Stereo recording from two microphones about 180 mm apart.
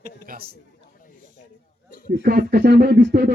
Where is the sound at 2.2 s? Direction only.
60° right (ahead or behind).